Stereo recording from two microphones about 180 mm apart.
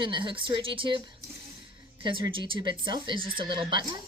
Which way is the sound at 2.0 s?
25° right (ahead or behind).